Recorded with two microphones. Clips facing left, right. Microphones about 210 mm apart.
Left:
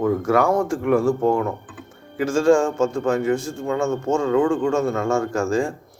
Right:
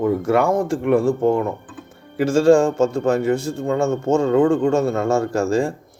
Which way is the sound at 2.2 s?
35° right (ahead or behind).